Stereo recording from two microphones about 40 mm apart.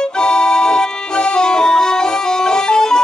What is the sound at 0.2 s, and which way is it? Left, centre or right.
Music, centre.